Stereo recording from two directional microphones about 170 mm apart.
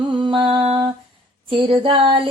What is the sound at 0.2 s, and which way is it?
Mantra, 30° right (ahead or behind).